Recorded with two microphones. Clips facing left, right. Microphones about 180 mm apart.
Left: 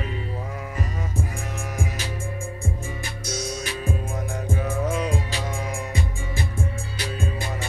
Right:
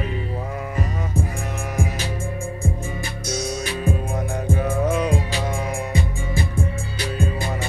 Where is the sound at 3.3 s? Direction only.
60° right (ahead or behind).